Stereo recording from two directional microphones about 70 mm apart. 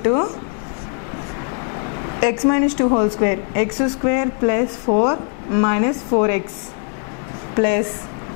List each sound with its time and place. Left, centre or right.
0.0 s speech: left
2.1 s a woman's voice: centre
7.5 s a woman's voice: centre